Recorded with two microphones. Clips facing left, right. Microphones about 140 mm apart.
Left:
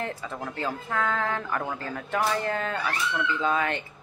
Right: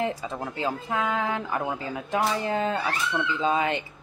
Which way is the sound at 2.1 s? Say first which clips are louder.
Right 1 dB; 20° right (ahead or behind).